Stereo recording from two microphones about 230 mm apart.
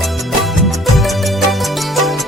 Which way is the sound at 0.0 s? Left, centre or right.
Centre.